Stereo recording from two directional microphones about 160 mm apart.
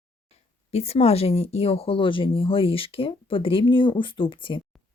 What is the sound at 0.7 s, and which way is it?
Speech, 40° left (ahead or behind).